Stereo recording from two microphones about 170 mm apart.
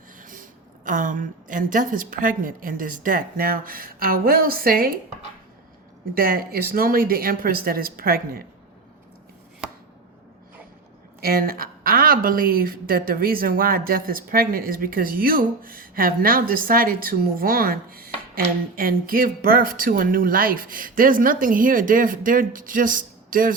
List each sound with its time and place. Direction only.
0.2 s a sound: 50° right (ahead or behind)
0.9 s a woman's voice: 50° right (ahead or behind)
6.1 s a woman's voice: 60° right (ahead or behind)
11.2 s a woman's voice: 60° right (ahead or behind)